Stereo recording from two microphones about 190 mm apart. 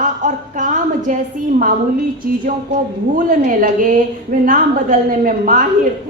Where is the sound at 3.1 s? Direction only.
45° right (ahead or behind).